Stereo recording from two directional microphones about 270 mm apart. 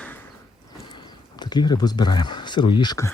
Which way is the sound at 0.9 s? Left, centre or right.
Centre.